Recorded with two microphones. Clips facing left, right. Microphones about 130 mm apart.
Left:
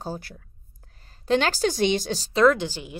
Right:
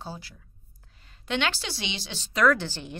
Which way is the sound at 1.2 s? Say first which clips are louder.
Left 7 dB; 40° left (ahead or behind).